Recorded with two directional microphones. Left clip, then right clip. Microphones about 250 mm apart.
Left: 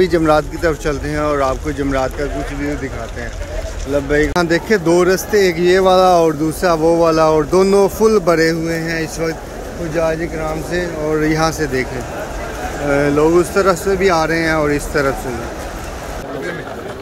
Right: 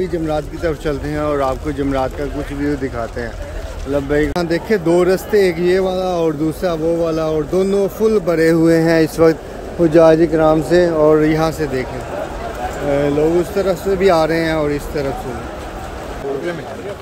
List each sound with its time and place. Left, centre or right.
0.0 s speech: centre
3.9 s speech: centre
8.6 s speech: centre
9.9 s speech: right; by 11.8 s centre
12.9 s speech: centre